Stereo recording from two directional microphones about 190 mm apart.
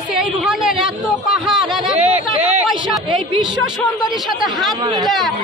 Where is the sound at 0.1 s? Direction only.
Centre (ahead or behind).